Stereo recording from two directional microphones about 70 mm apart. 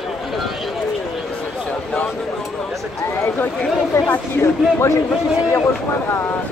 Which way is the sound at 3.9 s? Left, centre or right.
Left.